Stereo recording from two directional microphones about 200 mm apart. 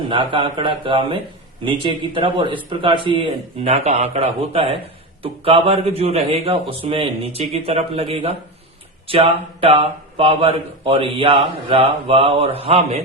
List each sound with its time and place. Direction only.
0.1 s speech: 25° right (ahead or behind)